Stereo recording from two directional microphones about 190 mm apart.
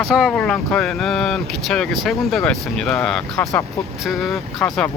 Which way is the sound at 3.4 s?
15° left (ahead or behind).